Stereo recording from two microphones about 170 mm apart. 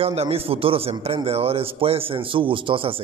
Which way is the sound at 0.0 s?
35° right (ahead or behind).